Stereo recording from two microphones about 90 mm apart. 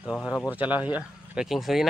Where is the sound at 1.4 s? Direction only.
5° right (ahead or behind).